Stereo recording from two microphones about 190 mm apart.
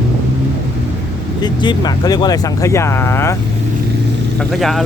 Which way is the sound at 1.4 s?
25° left (ahead or behind).